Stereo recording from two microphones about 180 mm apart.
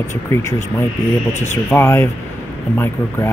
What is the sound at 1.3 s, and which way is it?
Speech, 15° left (ahead or behind).